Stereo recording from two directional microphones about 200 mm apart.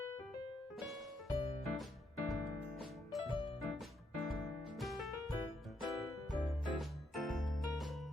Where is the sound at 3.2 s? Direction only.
25° left (ahead or behind).